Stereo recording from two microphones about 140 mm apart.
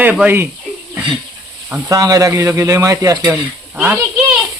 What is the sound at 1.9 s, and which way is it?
Speech, 25° right (ahead or behind).